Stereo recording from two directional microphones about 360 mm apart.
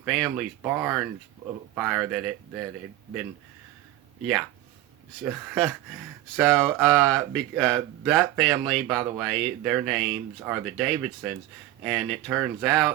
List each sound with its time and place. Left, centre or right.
0.0 s speech: centre
4.2 s speech: centre